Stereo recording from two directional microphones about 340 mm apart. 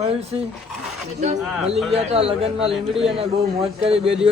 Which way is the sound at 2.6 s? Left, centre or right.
Centre.